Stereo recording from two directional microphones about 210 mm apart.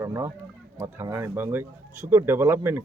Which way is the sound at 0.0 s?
15° right (ahead or behind).